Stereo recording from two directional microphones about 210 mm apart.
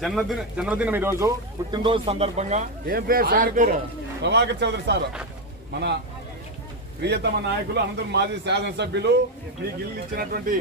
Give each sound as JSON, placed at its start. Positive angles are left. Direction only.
{"t": 0.0, "sound": "speech", "side_deg": 0}
{"t": 2.9, "sound": "a man's voice", "side_deg": -45}
{"t": 4.2, "sound": "a man's voice", "side_deg": -55}
{"t": 7.0, "sound": "a man's voice", "side_deg": -55}